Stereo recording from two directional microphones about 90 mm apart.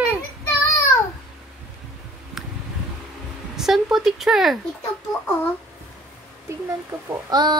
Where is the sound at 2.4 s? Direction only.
5° right (ahead or behind).